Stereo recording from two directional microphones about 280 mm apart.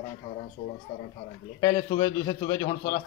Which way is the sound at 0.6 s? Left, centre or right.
Left.